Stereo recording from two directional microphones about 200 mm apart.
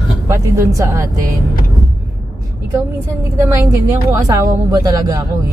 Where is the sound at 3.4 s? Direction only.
15° right (ahead or behind).